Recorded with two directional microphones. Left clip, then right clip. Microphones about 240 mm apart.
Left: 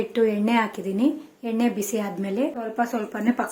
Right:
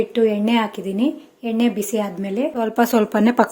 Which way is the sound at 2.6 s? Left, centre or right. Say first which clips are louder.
Right 8 dB; right.